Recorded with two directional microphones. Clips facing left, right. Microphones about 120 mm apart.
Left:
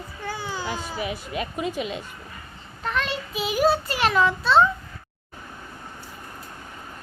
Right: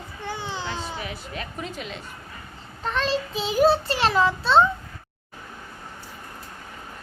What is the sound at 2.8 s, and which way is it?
Child singing, 30° right (ahead or behind).